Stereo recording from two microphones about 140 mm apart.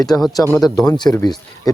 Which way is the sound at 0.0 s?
Centre (ahead or behind).